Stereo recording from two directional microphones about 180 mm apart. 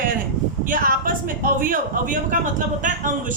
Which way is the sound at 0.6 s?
50° right (ahead or behind).